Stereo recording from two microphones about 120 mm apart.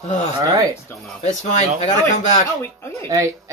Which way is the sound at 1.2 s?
80° left.